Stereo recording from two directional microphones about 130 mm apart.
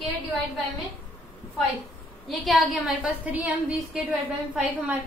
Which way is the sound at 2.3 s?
Centre (ahead or behind).